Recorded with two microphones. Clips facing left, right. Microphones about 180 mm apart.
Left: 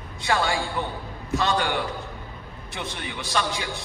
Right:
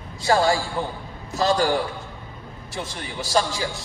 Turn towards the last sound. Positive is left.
turn(degrees=-35)  # may be behind; listen again after turning